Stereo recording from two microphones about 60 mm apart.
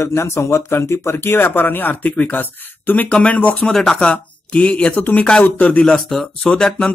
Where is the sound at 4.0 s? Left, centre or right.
Centre.